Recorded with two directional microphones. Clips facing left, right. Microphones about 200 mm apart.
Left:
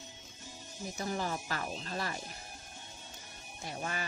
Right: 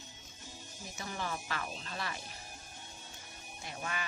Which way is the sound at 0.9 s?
40° left (ahead or behind).